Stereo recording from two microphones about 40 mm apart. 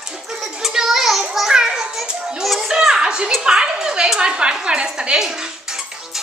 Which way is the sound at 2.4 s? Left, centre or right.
Centre.